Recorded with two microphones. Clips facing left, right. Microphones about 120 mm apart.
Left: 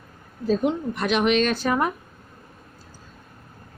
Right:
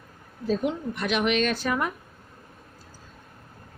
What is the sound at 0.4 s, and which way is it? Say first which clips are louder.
A woman's voice: left 4 dB; 30° left (ahead or behind).